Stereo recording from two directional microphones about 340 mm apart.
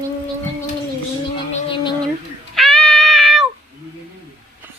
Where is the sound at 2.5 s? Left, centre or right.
Centre.